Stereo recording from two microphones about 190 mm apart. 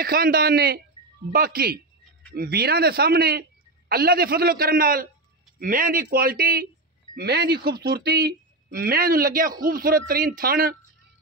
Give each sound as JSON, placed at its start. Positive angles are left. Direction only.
{"t": 0.0, "sound": "speech", "side_deg": -50}